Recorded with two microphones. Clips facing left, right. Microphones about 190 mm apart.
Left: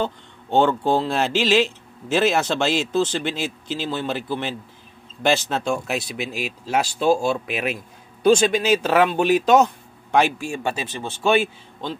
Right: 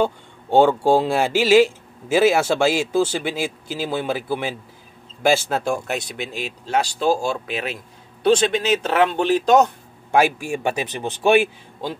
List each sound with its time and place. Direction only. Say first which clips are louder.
0.0 s speech: right 5 dB; 10° right (ahead or behind); by 7.1 s 5° left (ahead or behind)
7.6 s a man's voice: left 3 dB; 30° right (ahead or behind)
9.1 s speech: even; 10° left (ahead or behind)
10.1 s speech: right 2 dB; 10° right (ahead or behind)